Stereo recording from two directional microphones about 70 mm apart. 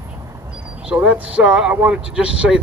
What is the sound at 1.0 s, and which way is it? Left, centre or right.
Speech, right.